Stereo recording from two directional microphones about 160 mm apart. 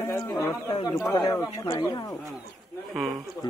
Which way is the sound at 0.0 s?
15° left (ahead or behind).